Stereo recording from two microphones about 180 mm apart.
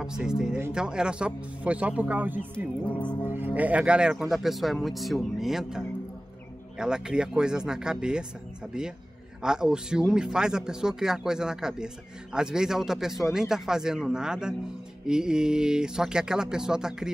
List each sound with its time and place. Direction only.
0.0 s speech: 5° right (ahead or behind)
3.0 s music: 25° left (ahead or behind)
3.5 s speech: 10° right (ahead or behind)